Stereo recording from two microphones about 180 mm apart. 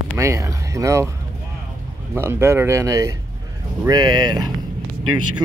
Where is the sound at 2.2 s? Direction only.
15° right (ahead or behind).